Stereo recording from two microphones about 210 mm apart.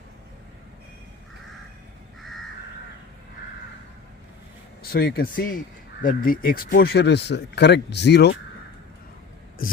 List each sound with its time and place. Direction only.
4.8 s speech: 45° left (ahead or behind)
9.6 s speech: 40° left (ahead or behind)